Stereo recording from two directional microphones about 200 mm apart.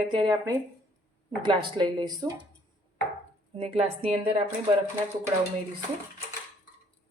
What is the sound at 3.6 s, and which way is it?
Speech, 30° right (ahead or behind).